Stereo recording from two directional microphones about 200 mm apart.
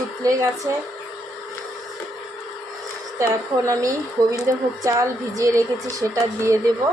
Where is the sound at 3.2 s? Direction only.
15° right (ahead or behind).